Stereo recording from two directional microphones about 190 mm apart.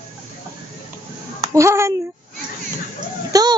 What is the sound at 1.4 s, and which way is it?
Speech, 15° right (ahead or behind).